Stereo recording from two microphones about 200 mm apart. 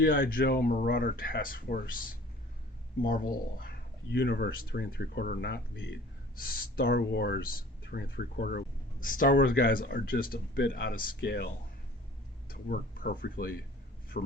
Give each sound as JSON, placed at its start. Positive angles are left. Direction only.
{"t": 0.0, "sound": "speech", "side_deg": 45}
{"t": 12.5, "sound": "speech", "side_deg": 45}